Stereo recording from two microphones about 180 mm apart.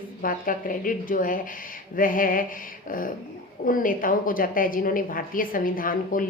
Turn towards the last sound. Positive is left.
turn(degrees=50)  # may be behind; listen again after turning